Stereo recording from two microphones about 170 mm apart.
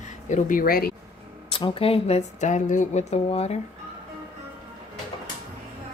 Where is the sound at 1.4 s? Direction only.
30° left (ahead or behind).